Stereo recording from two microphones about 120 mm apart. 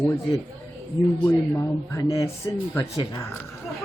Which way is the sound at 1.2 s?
25° left (ahead or behind).